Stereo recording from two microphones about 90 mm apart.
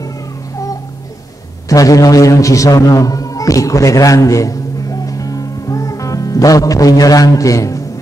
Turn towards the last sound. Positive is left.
turn(degrees=35)  # may be behind; listen again after turning